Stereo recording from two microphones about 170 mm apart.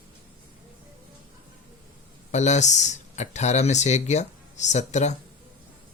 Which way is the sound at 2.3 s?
45° left (ahead or behind).